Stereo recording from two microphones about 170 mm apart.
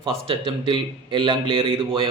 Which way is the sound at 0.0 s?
30° right (ahead or behind).